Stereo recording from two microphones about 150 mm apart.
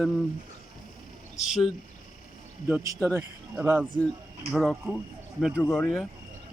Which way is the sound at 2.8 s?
20° right (ahead or behind).